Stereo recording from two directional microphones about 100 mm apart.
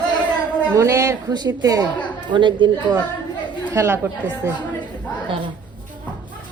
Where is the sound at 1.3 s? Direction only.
40° right (ahead or behind).